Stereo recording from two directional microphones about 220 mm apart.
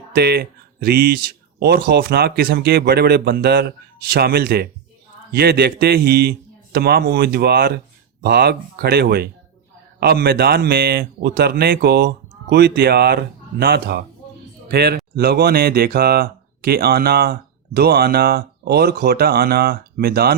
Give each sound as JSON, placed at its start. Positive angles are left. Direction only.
{"t": 0.1, "sound": "speech", "side_deg": -45}